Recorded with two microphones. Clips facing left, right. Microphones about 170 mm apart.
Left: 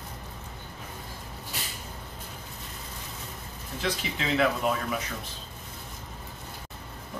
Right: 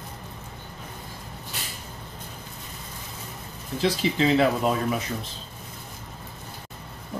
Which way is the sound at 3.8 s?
30° right (ahead or behind).